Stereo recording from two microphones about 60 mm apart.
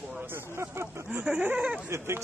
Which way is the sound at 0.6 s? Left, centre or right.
Right.